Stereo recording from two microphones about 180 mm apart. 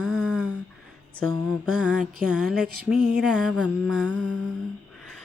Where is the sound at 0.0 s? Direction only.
5° right (ahead or behind).